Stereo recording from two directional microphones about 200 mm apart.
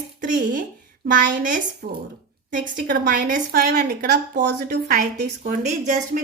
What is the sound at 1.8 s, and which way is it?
A woman's voice, 50° right (ahead or behind).